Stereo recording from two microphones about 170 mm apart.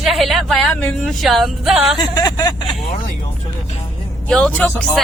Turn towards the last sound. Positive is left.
turn(degrees=5)  # may be behind; listen again after turning